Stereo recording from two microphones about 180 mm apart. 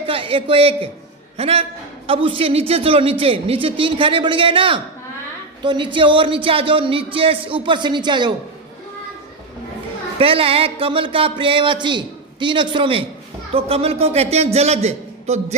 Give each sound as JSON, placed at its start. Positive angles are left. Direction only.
{"t": 0.0, "sound": "a man's voice", "side_deg": -30}
{"t": 10.2, "sound": "a man's voice", "side_deg": -30}